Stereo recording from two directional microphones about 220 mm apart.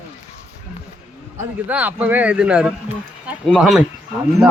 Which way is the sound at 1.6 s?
5° right (ahead or behind).